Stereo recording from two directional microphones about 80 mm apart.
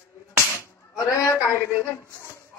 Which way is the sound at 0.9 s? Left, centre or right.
Left.